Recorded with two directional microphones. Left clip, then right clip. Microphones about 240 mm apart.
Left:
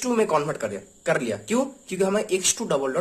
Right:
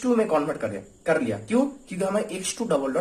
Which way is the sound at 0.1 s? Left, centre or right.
Left.